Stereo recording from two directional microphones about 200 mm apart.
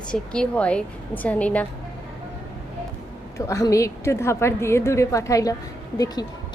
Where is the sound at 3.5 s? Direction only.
15° left (ahead or behind).